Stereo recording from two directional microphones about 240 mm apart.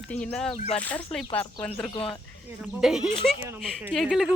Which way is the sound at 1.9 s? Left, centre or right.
Left.